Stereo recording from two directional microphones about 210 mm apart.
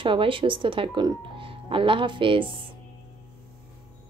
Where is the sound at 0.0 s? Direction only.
25° right (ahead or behind).